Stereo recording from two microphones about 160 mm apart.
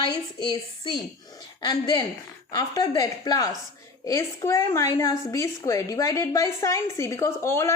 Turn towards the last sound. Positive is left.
turn(degrees=15)  # may be behind; listen again after turning